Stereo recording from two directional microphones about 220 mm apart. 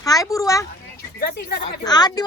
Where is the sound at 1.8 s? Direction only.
20° left (ahead or behind).